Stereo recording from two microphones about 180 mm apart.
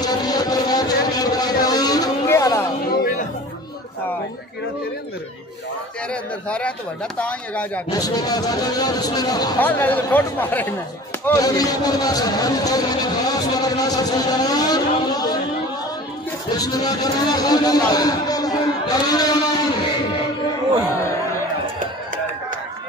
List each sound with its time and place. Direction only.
0.0 s vehicle: 20° left (ahead or behind)
2.9 s music: 45° left (ahead or behind)
7.2 s speech: 10° left (ahead or behind)
7.9 s a man's voice: 20° left (ahead or behind)
9.6 s a man's voice: 10° left (ahead or behind)
16.5 s a man's voice: 20° left (ahead or behind)